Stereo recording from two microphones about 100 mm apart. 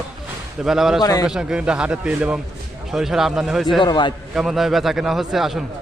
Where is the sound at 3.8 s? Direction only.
50° left (ahead or behind).